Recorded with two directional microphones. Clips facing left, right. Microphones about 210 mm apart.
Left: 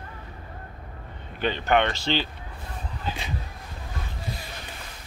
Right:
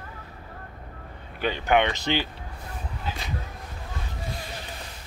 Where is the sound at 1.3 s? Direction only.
10° right (ahead or behind).